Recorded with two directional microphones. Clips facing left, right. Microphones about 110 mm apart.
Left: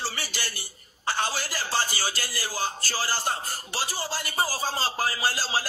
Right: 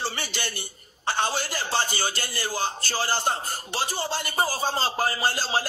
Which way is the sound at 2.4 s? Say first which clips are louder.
Right 3 dB; 30° right (ahead or behind).